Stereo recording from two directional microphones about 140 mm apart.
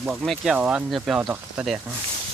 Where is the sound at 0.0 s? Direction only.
5° right (ahead or behind).